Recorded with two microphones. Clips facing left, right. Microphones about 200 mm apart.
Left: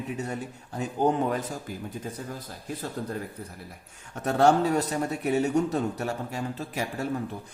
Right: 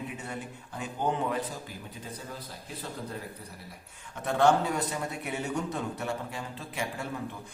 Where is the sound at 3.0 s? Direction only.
50° left (ahead or behind).